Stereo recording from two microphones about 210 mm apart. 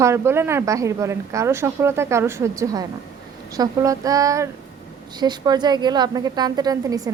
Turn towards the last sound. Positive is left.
turn(degrees=-15)  # may be behind; listen again after turning